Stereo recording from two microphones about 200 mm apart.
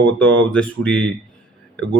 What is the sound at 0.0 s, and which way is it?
Speech, 10° left (ahead or behind).